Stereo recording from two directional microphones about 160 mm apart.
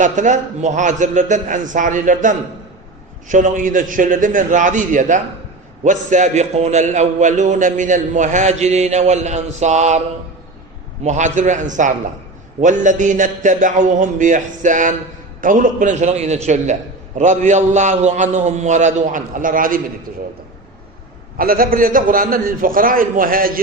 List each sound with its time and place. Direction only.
0.0 s a man's voice: 50° right (ahead or behind)
11.0 s a man's voice: 50° right (ahead or behind)
21.3 s a man's voice: 65° right (ahead or behind)